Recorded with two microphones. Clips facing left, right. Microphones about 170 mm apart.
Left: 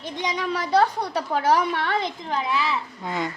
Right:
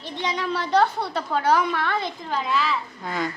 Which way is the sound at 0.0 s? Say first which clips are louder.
Even; 15° left (ahead or behind).